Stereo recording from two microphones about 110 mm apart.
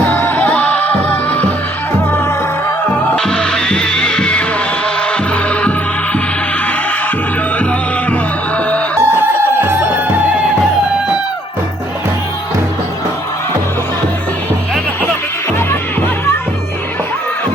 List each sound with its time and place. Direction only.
0.1 s music: 20° left (ahead or behind)
3.2 s music: 5° left (ahead or behind)
7.6 s music: 10° left (ahead or behind)
9.0 s music: 20° right (ahead or behind)
15.5 s music: 20° left (ahead or behind)